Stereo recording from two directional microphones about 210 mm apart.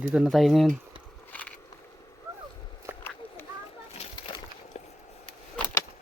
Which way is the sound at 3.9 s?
30° left (ahead or behind).